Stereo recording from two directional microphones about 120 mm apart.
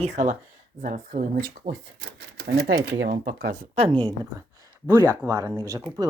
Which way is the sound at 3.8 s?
40° right (ahead or behind).